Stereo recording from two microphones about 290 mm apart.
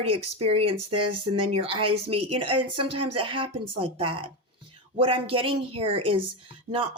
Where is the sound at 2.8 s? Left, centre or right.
Right.